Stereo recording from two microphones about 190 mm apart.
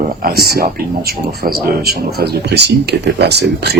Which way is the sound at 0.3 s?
55° right (ahead or behind).